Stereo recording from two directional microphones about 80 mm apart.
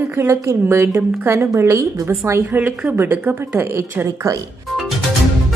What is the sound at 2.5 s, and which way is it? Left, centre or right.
A woman's voice, right.